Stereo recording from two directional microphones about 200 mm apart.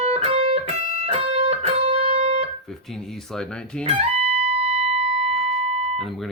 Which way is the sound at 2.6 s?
Centre (ahead or behind).